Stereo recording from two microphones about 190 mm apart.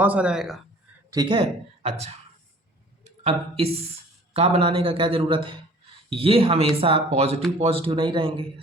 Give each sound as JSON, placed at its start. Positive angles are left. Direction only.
{"t": 0.0, "sound": "speech", "side_deg": -5}
{"t": 1.1, "sound": "speech", "side_deg": -25}
{"t": 3.0, "sound": "a sound", "side_deg": -30}
{"t": 4.4, "sound": "speech", "side_deg": -35}